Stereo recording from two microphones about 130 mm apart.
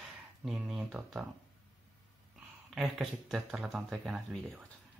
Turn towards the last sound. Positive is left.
turn(degrees=-5)  # may be behind; listen again after turning